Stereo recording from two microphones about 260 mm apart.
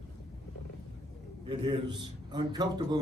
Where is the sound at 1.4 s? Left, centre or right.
Centre.